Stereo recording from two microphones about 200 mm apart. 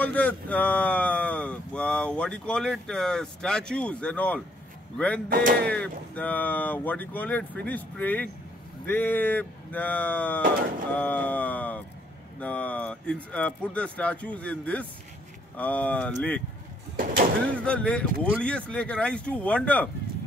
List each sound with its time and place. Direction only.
0.0 s speech: 5° left (ahead or behind)
5.3 s speech: 50° right (ahead or behind)
5.7 s speech: 5° left (ahead or behind)
16.9 s door: 45° right (ahead or behind)
17.6 s speech: 5° left (ahead or behind)